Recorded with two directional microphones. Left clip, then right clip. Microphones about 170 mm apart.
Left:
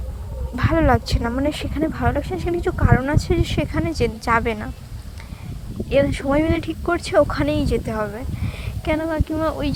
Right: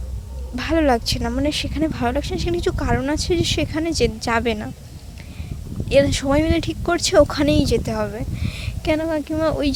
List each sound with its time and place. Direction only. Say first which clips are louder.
0.5 s speech: even; 30° right (ahead or behind)
5.9 s speech: right 2 dB; 45° right (ahead or behind)